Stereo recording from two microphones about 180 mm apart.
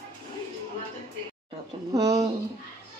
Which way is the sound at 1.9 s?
20° right (ahead or behind).